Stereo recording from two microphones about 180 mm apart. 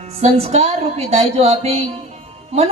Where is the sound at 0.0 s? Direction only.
35° right (ahead or behind).